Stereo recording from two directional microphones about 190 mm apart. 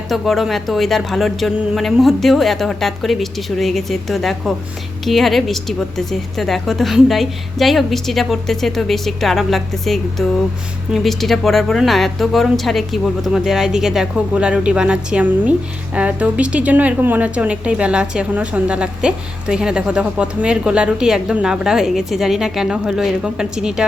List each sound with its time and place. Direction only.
0.1 s speech: centre (ahead or behind)